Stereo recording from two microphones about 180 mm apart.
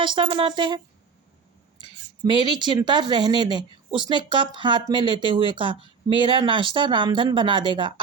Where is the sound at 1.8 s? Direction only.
25° right (ahead or behind).